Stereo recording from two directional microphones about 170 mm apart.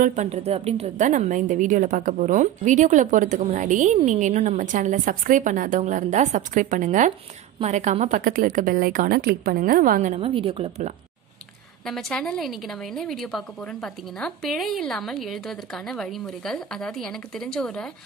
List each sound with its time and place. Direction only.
0.0 s a woman's voice: 45° right (ahead or behind)
11.8 s a woman's voice: 5° left (ahead or behind)